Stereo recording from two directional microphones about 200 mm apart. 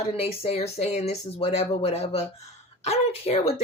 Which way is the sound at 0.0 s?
30° left (ahead or behind).